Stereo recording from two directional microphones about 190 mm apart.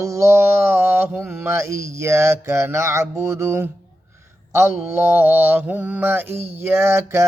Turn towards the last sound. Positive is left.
turn(degrees=-15)  # may be behind; listen again after turning